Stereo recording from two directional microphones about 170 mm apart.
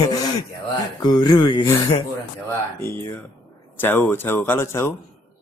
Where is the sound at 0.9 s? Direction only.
25° left (ahead or behind).